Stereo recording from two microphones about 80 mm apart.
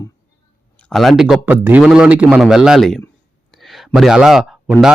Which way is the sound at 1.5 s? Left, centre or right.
Right.